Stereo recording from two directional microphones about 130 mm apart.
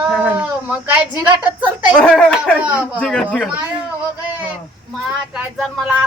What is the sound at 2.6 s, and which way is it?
Speech, 10° right (ahead or behind).